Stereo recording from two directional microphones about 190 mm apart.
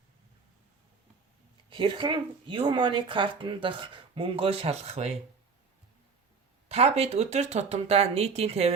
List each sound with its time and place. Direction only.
1.7 s speech: 25° right (ahead or behind)
6.7 s speech: 35° right (ahead or behind)